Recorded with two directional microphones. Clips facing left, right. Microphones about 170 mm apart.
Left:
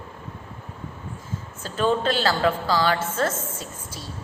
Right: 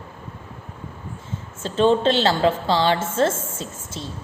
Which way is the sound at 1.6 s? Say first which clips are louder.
Right 5 dB; 25° right (ahead or behind).